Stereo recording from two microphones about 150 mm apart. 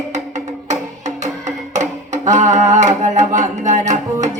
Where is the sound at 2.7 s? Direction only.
55° right (ahead or behind).